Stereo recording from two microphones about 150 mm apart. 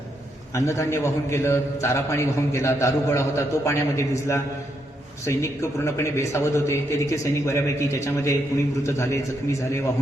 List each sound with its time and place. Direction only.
0.5 s a man's voice: 20° left (ahead or behind)